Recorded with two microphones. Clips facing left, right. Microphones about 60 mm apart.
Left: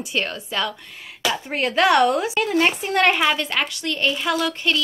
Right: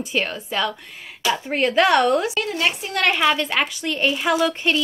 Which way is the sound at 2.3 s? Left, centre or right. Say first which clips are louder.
Left 3 dB; left.